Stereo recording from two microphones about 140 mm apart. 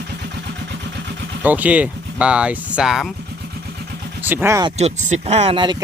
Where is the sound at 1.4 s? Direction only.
10° right (ahead or behind).